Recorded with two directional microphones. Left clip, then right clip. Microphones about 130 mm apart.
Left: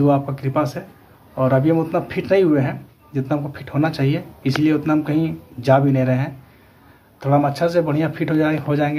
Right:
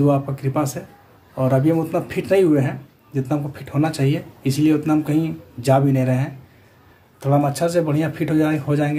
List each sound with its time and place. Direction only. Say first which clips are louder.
0.0 s a man's voice: left 1 dB; 20° right (ahead or behind)